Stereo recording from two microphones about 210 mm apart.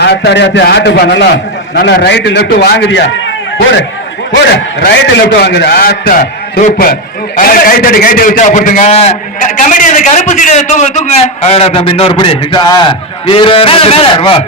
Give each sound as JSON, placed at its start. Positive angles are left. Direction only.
{"t": 0.0, "sound": "a man's voice", "side_deg": 50}
{"t": 4.5, "sound": "a man's voice", "side_deg": 50}